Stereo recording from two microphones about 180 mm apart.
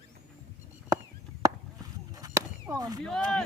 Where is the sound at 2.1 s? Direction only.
20° right (ahead or behind).